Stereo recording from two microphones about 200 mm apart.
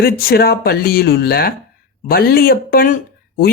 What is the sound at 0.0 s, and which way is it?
Speech, 50° left (ahead or behind).